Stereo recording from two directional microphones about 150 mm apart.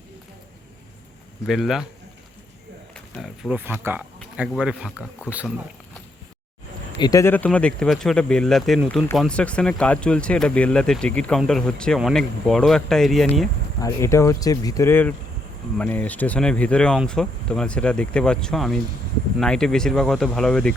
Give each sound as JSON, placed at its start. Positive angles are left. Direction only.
{"t": 1.5, "sound": "speech", "side_deg": 0}
{"t": 3.5, "sound": "speech", "side_deg": -15}
{"t": 7.0, "sound": "speech", "side_deg": 20}
{"t": 13.8, "sound": "speech", "side_deg": 20}